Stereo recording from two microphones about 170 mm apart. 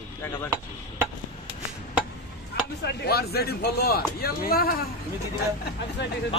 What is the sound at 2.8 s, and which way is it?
A man's voice, 70° left (ahead or behind).